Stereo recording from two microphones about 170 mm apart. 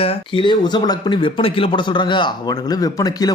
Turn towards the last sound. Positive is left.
turn(degrees=20)  # may be behind; listen again after turning